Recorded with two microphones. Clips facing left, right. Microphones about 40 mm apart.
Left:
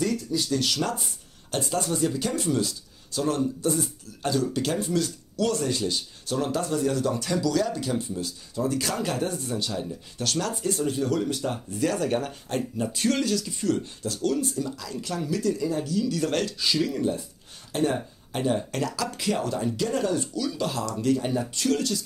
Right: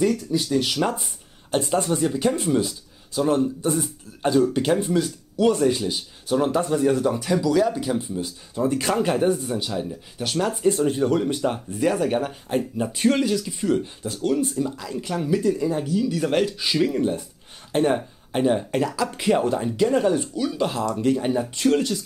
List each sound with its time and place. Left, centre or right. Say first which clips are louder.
0.3 s speech: right 4 dB; right
8.5 s speech: right 5 dB; right